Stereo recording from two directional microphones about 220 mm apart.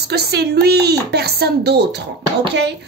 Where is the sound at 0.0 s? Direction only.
50° right (ahead or behind).